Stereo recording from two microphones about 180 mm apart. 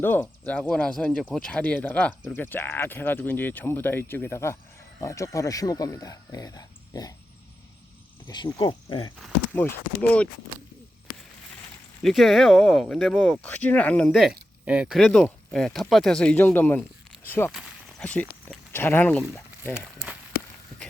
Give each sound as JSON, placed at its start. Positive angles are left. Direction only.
{"t": 0.0, "sound": "speech", "side_deg": 10}
{"t": 8.5, "sound": "speech", "side_deg": 25}
{"t": 9.2, "sound": "speech", "side_deg": 5}
{"t": 12.0, "sound": "speech", "side_deg": 0}
{"t": 19.7, "sound": "speech", "side_deg": -5}